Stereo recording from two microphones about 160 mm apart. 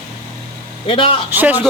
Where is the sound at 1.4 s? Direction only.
10° right (ahead or behind).